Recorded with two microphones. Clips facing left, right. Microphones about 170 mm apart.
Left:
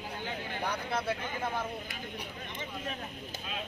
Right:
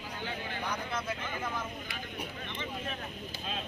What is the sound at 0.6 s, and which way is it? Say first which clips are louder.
Vehicle: left 4 dB; 35° left (ahead or behind).